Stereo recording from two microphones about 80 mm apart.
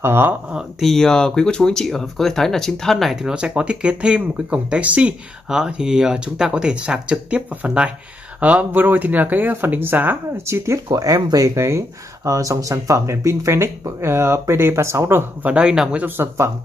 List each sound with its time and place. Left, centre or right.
0.0 s speech: right
0.5 s speech: centre
0.8 s speech: centre; by 10.4 s right
10.4 s speech: right
10.9 s speech: right
15.4 s speech: centre
16.2 s speech: right